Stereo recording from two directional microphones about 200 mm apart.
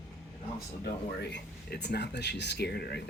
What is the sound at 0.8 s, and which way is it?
Speech, 55° left (ahead or behind).